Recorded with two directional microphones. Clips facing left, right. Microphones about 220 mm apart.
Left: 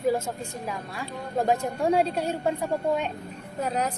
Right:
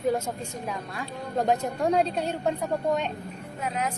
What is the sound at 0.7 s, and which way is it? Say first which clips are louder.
A woman's voice: even; 5° left (ahead or behind).